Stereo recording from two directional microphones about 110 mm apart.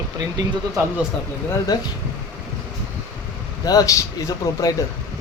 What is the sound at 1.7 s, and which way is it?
Speech, 40° left (ahead or behind).